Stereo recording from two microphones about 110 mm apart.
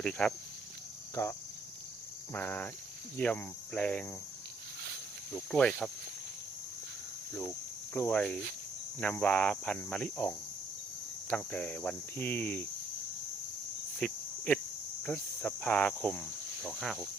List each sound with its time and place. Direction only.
0.0 s speech: 5° left (ahead or behind)
1.1 s speech: 30° left (ahead or behind)
2.3 s cricket: 20° left (ahead or behind)
3.2 s speech: 15° left (ahead or behind)
5.5 s speech: 5° left (ahead or behind)
7.9 s speech: 15° left (ahead or behind)
11.3 s speech: 15° left (ahead or behind)
14.0 s cricket: 10° left (ahead or behind)
15.4 s speech: 10° left (ahead or behind)